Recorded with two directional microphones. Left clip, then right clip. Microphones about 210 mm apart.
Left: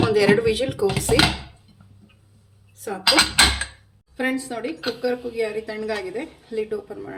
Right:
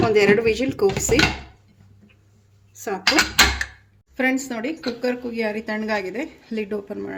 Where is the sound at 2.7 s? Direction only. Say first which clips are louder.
Right 3 dB; 40° right (ahead or behind).